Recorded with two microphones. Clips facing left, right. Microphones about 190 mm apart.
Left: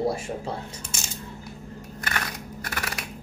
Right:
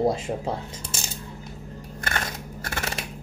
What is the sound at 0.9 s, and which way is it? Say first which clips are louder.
Coin: right 3 dB; 35° right (ahead or behind).